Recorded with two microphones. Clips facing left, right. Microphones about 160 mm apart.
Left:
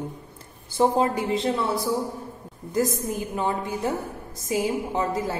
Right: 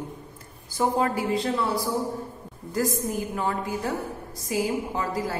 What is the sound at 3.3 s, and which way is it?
A woman's voice, 20° left (ahead or behind).